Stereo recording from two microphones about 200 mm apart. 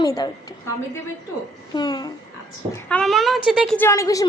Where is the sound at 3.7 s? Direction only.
15° left (ahead or behind).